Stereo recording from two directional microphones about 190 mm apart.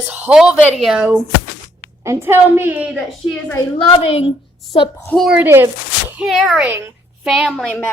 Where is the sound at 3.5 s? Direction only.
30° left (ahead or behind).